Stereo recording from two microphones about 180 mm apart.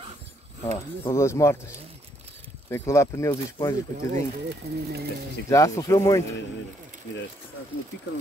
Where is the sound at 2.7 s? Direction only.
15° left (ahead or behind).